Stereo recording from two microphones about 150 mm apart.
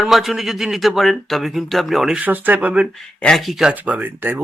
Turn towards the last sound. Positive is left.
turn(degrees=-15)  # may be behind; listen again after turning